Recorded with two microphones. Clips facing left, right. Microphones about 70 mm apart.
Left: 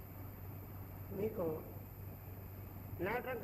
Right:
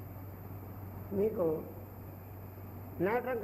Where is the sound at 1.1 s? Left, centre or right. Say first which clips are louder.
Right 8 dB; right.